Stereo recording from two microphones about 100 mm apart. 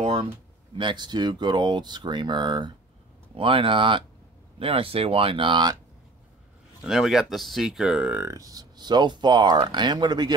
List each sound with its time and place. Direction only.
0.0 s a sound: 70° right (ahead or behind)
0.7 s speech: 50° right (ahead or behind)
3.3 s speech: 60° right (ahead or behind)
6.8 s speech: 5° right (ahead or behind)
8.2 s speech: 35° right (ahead or behind)